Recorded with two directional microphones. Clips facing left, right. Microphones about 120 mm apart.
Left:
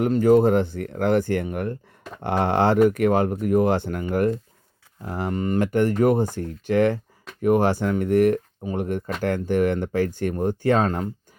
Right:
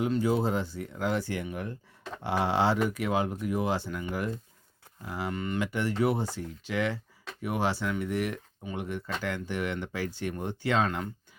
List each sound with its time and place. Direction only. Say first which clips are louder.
0.0 s speech: left 10 dB; 55° left (ahead or behind)